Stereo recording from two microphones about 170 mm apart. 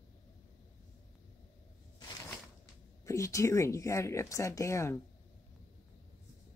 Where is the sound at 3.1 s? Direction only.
20° left (ahead or behind).